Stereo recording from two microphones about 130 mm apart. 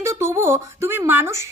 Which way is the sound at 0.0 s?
20° right (ahead or behind).